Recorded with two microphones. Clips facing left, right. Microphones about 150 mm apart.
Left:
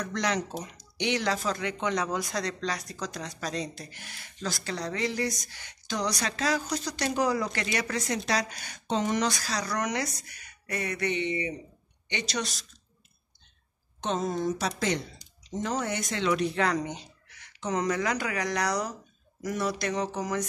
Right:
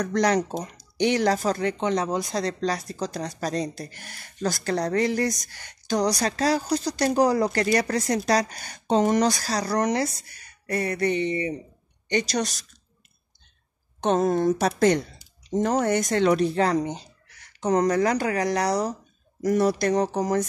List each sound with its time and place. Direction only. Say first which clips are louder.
0.0 s speech: right 8 dB; 40° right (ahead or behind)
14.0 s speech: right 8 dB; 55° right (ahead or behind); by 18.9 s 30° right (ahead or behind)
19.4 s speech: right 9 dB; 40° right (ahead or behind)